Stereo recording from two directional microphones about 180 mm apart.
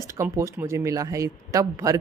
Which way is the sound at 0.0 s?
15° right (ahead or behind).